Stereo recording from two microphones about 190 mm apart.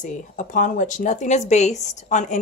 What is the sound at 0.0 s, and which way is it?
Speech, 40° left (ahead or behind).